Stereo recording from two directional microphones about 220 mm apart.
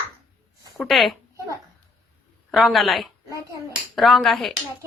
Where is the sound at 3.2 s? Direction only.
15° right (ahead or behind).